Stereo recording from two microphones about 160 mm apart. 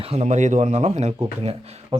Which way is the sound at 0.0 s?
40° right (ahead or behind).